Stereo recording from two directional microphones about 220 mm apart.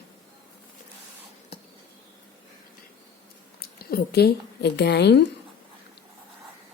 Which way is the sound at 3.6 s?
45° left (ahead or behind).